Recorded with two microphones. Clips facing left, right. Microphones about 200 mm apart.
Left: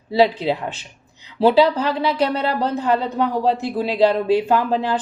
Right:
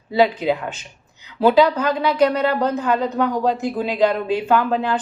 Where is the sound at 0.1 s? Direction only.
30° left (ahead or behind).